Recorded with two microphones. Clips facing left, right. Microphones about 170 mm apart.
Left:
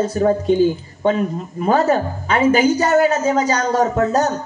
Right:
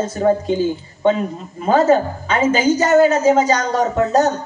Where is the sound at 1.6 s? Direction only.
25° right (ahead or behind).